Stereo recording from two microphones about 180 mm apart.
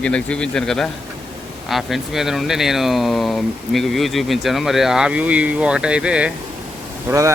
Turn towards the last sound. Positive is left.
turn(degrees=-15)  # may be behind; listen again after turning